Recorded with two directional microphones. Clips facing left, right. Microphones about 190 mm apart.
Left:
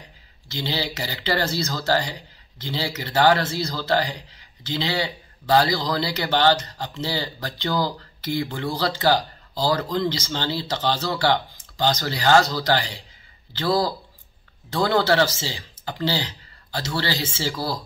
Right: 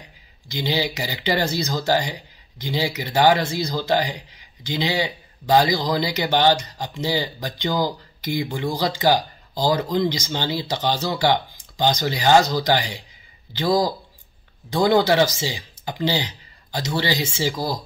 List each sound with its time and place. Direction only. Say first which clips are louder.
0.5 s speech: right 4 dB; 15° right (ahead or behind)